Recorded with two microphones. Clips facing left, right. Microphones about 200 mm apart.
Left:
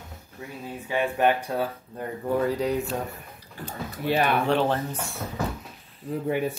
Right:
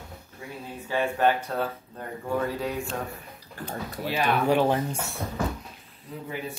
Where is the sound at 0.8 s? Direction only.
15° left (ahead or behind).